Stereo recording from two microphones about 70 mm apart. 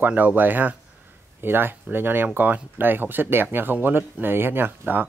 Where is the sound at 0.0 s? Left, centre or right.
Right.